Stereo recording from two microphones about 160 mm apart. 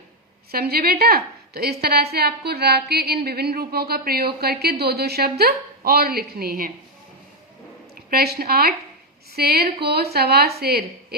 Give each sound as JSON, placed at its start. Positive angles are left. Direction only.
{"t": 0.5, "sound": "a woman's voice", "side_deg": -75}
{"t": 8.1, "sound": "a woman's voice", "side_deg": -80}
{"t": 9.8, "sound": "a woman's voice", "side_deg": -90}